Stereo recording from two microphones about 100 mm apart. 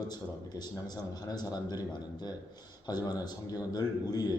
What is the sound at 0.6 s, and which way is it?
A man's voice, 40° left (ahead or behind).